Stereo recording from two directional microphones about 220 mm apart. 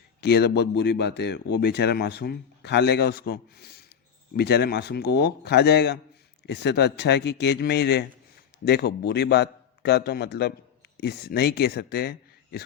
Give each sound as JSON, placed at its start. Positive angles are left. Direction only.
{"t": 0.2, "sound": "speech", "side_deg": 50}